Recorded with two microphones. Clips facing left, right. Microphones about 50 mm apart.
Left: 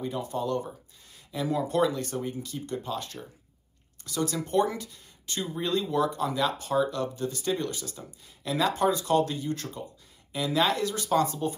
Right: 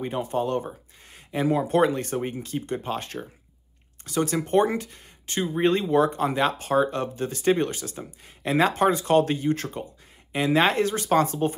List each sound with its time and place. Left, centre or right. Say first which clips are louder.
0.0 s speech: right 4 dB; right